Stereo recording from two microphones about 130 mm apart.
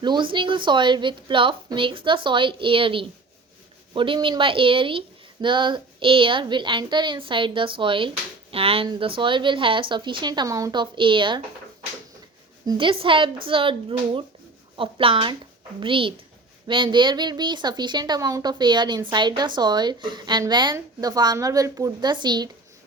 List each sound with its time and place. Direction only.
0.0 s speech: 35° right (ahead or behind)
10.8 s speech: 40° right (ahead or behind)
12.6 s speech: 40° right (ahead or behind)